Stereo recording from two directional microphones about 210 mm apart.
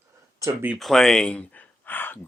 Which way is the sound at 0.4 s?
5° right (ahead or behind).